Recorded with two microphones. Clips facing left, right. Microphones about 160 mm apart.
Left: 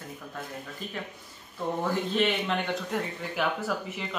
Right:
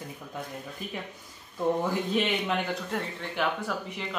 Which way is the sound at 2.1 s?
10° right (ahead or behind).